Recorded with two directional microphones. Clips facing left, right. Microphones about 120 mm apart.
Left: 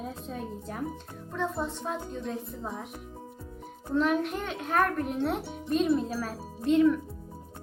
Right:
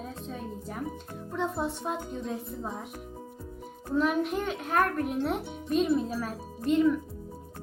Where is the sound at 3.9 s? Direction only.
5° right (ahead or behind).